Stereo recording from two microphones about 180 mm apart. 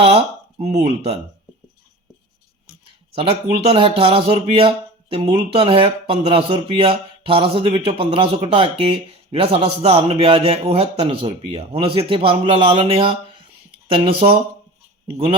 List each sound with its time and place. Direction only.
0.0 s speech: 35° right (ahead or behind)
3.7 s speech: 30° right (ahead or behind)